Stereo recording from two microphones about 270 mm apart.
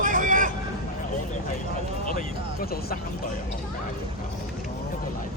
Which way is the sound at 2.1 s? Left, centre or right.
Left.